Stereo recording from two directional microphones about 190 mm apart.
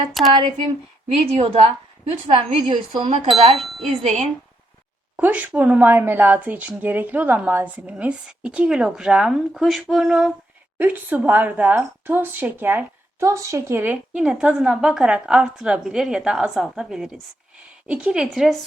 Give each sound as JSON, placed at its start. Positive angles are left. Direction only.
{"t": 0.1, "sound": "a woman's voice", "side_deg": 0}
{"t": 1.0, "sound": "a woman's voice", "side_deg": -35}
{"t": 5.1, "sound": "a woman's voice", "side_deg": -10}